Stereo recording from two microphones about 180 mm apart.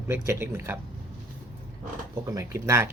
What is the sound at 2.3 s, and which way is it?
Speech, 15° right (ahead or behind).